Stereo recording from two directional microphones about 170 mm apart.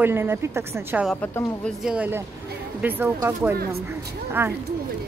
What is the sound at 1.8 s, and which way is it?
Speech, 5° right (ahead or behind).